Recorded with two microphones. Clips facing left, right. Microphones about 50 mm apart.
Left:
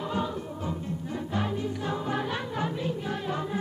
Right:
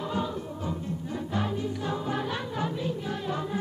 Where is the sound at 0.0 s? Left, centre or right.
Left.